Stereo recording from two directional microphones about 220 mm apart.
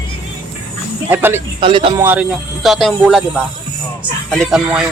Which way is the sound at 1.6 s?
25° right (ahead or behind).